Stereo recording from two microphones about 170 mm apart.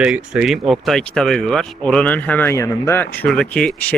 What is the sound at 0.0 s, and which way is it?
Speech, 5° right (ahead or behind).